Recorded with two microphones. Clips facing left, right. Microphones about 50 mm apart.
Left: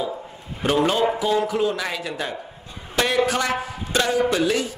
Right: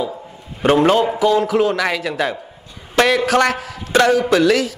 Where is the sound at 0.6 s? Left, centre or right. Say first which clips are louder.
Right 6 dB; right.